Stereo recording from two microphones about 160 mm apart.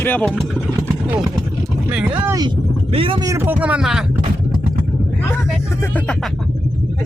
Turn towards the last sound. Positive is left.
turn(degrees=10)  # may be behind; listen again after turning